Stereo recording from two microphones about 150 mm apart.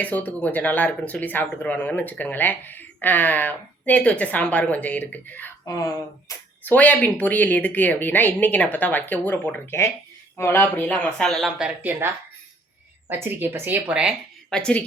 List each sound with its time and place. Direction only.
0.0 s speech: 10° left (ahead or behind)
5.6 s speech: 20° left (ahead or behind)
6.7 s speech: 10° left (ahead or behind)
13.1 s speech: 15° right (ahead or behind)
14.5 s speech: 5° left (ahead or behind)